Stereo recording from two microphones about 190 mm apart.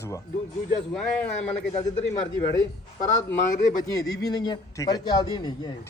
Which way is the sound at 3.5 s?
45° left (ahead or behind).